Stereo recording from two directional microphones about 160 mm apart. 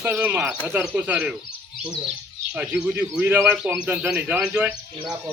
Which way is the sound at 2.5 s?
10° right (ahead or behind).